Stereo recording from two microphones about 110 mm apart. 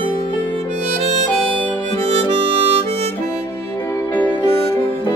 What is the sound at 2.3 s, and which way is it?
Harmonica, 55° right (ahead or behind).